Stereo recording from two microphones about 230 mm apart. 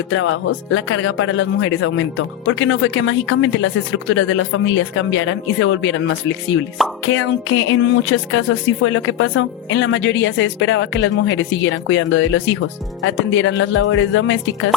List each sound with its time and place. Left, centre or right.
0.1 s speech: left